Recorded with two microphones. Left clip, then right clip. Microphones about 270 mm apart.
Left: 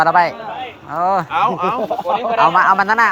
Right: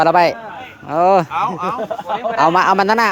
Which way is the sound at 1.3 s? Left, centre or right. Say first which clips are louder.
Left 3 dB; right.